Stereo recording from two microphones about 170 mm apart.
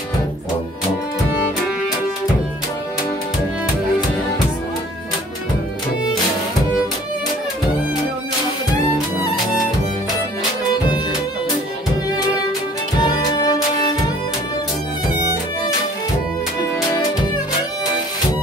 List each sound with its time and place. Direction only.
13.0 s music: 25° left (ahead or behind)